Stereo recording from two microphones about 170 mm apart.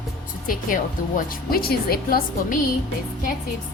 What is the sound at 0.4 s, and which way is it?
Speech, 55° left (ahead or behind).